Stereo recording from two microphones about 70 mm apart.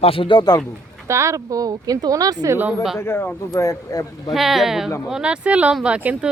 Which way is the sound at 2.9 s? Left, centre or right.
Left.